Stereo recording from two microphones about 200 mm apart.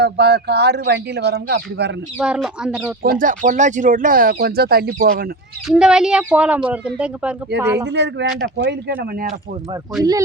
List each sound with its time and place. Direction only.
0.0 s speech: 55° right (ahead or behind)
2.1 s speech: 5° right (ahead or behind)
3.0 s speech: 45° right (ahead or behind)
5.6 s speech: 5° right (ahead or behind)
7.9 s speech: 60° right (ahead or behind)
10.0 s speech: 20° right (ahead or behind)